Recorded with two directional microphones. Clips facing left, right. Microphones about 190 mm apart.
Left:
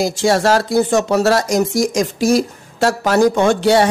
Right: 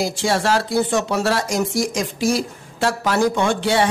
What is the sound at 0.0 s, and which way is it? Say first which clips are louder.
Speech: left 5 dB; 45° left (ahead or behind).